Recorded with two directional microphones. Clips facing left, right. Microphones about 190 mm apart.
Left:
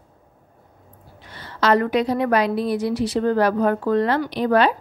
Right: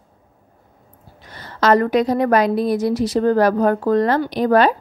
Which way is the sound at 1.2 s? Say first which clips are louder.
Right 3 dB; 40° right (ahead or behind).